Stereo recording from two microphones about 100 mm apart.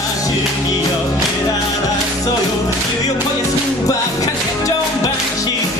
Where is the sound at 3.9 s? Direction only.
35° left (ahead or behind).